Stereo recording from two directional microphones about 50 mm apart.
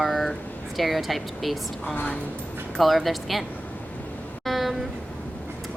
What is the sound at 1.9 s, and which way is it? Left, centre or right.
Speech, left.